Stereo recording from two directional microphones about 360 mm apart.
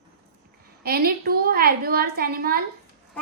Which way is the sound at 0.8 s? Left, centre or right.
Right.